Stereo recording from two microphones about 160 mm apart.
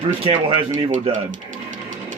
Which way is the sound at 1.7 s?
55° right (ahead or behind).